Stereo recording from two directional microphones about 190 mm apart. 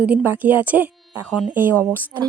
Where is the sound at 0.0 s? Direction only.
5° right (ahead or behind).